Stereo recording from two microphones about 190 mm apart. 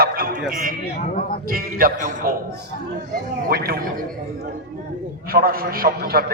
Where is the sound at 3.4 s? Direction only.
55° right (ahead or behind).